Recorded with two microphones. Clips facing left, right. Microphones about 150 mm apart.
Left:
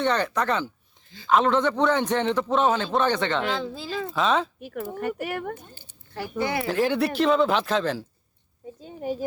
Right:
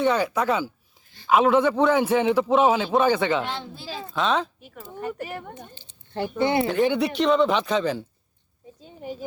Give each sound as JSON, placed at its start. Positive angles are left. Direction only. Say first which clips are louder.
{"t": 0.0, "sound": "a man's voice", "louder": "right 2 dB", "side_deg": -5}
{"t": 4.6, "sound": "speech", "louder": "left 4 dB", "side_deg": 65}
{"t": 5.7, "sound": "a sound", "louder": "right 5 dB", "side_deg": -25}
{"t": 6.4, "sound": "speech", "louder": "right 5 dB", "side_deg": -25}
{"t": 6.7, "sound": "speech", "louder": "right 1 dB", "side_deg": 0}